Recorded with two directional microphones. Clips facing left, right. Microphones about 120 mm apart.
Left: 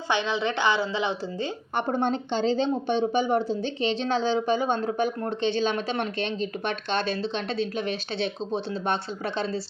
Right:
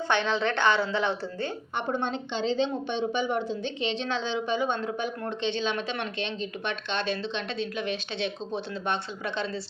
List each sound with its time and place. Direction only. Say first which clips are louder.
0.1 s a woman's voice: left 1 dB; 10° left (ahead or behind)
1.7 s speech: left 5 dB; 40° left (ahead or behind)